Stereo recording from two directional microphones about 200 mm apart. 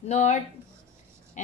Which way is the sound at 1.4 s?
35° left (ahead or behind).